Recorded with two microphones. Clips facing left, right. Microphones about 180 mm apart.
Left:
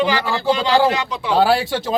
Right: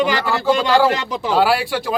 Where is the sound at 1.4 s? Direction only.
25° left (ahead or behind).